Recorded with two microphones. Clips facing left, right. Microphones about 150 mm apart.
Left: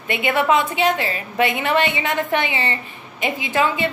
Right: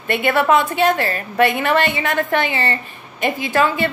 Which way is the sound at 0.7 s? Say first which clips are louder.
Right 3 dB; 50° right (ahead or behind).